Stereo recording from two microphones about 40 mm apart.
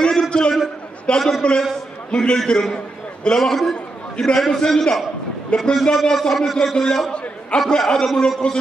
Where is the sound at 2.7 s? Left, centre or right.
Left.